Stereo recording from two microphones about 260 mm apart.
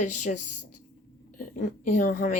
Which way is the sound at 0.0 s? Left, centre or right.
Left.